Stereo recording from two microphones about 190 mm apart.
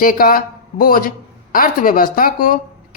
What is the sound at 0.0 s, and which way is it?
Speech, 45° left (ahead or behind).